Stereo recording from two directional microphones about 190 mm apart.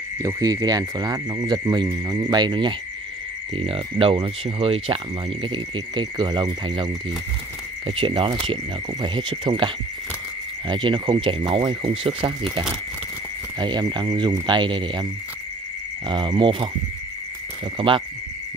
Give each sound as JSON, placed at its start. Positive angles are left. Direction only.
{"t": 0.2, "sound": "speech", "side_deg": -20}
{"t": 10.7, "sound": "speech", "side_deg": -25}
{"t": 13.6, "sound": "speech", "side_deg": -25}
{"t": 16.1, "sound": "speech", "side_deg": -25}
{"t": 17.7, "sound": "speech", "side_deg": -25}